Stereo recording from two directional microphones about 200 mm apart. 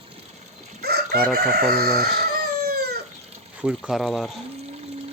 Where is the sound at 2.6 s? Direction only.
50° right (ahead or behind).